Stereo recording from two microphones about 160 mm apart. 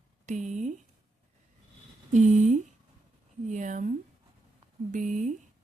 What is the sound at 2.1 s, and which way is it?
Speech, 50° right (ahead or behind).